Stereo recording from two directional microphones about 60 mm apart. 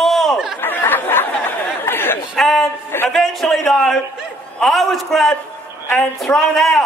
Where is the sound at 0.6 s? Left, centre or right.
Left.